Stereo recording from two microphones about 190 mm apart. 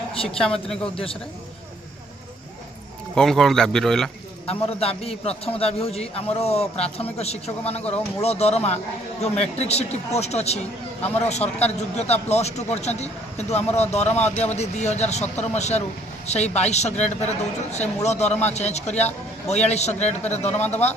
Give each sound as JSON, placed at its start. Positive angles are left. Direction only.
{"t": 0.4, "sound": "a man's voice", "side_deg": 5}
{"t": 3.2, "sound": "a man's voice", "side_deg": 0}
{"t": 4.5, "sound": "a man's voice", "side_deg": 30}